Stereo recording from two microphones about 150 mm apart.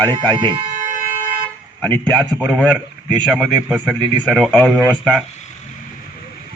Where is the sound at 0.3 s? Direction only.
30° right (ahead or behind).